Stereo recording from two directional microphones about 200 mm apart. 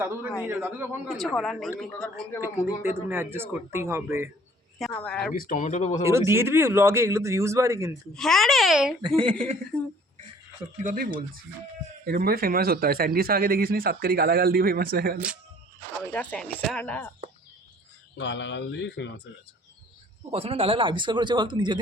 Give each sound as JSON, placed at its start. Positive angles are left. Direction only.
{"t": 0.0, "sound": "speech", "side_deg": -10}
{"t": 1.0, "sound": "a child's voice", "side_deg": 0}
{"t": 2.4, "sound": "speech", "side_deg": -10}
{"t": 5.0, "sound": "a child's voice", "side_deg": 5}
{"t": 5.3, "sound": "speech", "side_deg": 40}
{"t": 6.1, "sound": "speech", "side_deg": -15}
{"t": 8.1, "sound": "a child's voice", "side_deg": 0}
{"t": 9.0, "sound": "speech", "side_deg": -25}
{"t": 9.7, "sound": "a child's voice", "side_deg": 5}
{"t": 10.8, "sound": "a man's voice", "side_deg": -45}
{"t": 16.1, "sound": "speech", "side_deg": 5}
{"t": 18.2, "sound": "speech", "side_deg": 65}
{"t": 20.3, "sound": "speech", "side_deg": -30}